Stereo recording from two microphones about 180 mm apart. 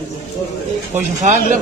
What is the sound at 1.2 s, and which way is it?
Speech, 45° right (ahead or behind).